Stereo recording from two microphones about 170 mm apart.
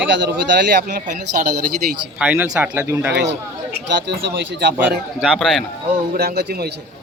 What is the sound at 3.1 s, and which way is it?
Speech, 90° right.